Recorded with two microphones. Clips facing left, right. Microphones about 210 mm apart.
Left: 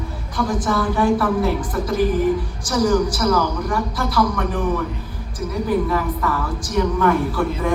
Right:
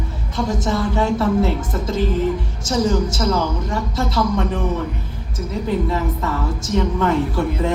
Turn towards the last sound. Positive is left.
turn(degrees=-25)  # may be behind; listen again after turning